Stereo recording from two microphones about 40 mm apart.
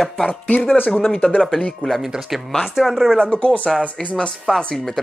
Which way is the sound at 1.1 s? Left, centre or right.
Left.